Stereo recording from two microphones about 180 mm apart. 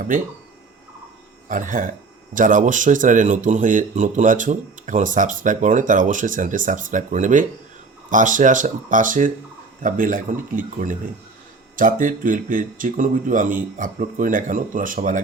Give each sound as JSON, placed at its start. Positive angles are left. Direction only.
{"t": 1.5, "sound": "speech", "side_deg": -45}